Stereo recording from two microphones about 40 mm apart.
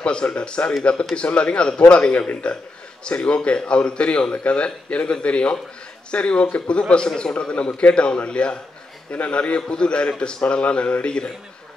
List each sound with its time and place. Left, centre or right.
0.0 s a man's voice: left